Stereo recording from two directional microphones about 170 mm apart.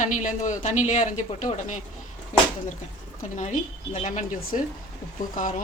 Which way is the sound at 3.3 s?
45° left (ahead or behind).